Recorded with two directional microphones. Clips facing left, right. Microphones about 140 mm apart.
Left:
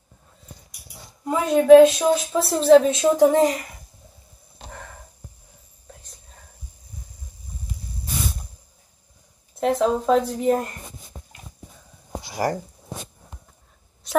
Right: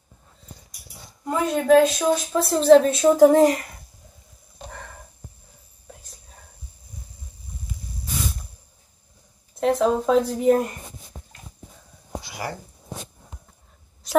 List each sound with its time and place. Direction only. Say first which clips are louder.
1.3 s a woman's voice: left 5 dB; centre (ahead or behind)
9.6 s a woman's voice: even; centre (ahead or behind)
12.4 s speech: left 9 dB; 40° left (ahead or behind)